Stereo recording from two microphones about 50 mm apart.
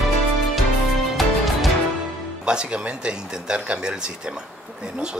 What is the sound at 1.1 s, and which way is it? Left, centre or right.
Music, centre.